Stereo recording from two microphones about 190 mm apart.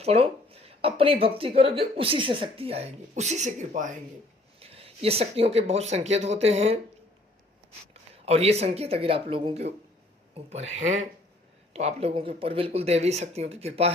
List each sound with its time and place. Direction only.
0.0 s speech: 30° right (ahead or behind)
4.6 s speech: 30° right (ahead or behind)
8.1 s speech: 30° right (ahead or behind)